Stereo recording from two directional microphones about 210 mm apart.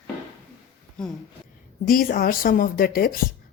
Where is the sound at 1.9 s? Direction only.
40° left (ahead or behind).